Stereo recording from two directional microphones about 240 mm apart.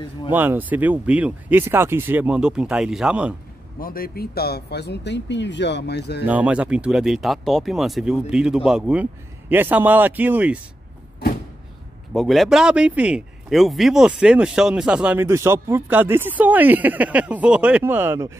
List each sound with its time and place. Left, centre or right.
0.3 s speech: centre
3.8 s speech: left
6.2 s speech: centre
12.1 s speech: centre